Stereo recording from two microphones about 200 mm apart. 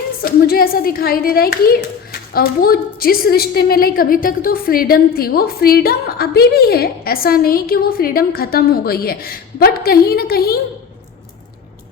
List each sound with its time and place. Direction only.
0.2 s a woman's voice: 50° left (ahead or behind)